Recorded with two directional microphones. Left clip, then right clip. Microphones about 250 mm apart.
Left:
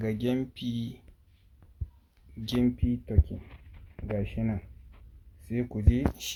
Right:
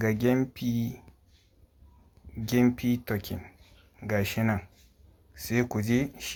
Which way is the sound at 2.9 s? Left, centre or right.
Right.